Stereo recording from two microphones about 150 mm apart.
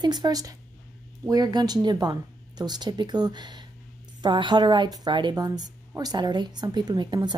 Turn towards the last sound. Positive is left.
turn(degrees=-30)  # may be behind; listen again after turning